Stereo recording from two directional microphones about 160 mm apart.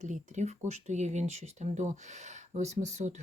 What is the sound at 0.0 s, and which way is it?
Speech, 45° right (ahead or behind).